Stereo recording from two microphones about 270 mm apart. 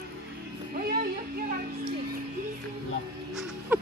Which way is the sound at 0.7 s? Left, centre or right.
Right.